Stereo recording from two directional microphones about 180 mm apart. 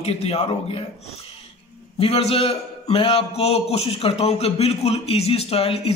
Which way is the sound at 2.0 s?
35° left (ahead or behind).